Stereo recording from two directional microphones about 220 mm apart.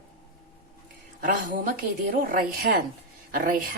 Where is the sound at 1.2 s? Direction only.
40° right (ahead or behind).